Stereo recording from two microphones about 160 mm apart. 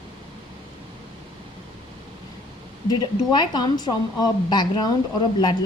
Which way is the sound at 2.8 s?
25° left (ahead or behind).